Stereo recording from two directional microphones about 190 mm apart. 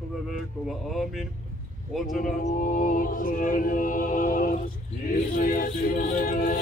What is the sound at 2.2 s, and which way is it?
Speech, 45° left (ahead or behind).